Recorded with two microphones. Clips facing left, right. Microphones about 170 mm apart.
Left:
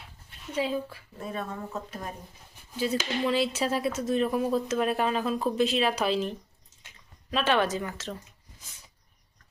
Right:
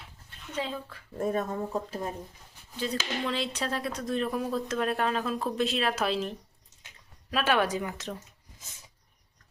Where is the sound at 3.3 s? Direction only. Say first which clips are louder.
Left 7 dB; 5° left (ahead or behind); by 8.1 s 15° right (ahead or behind).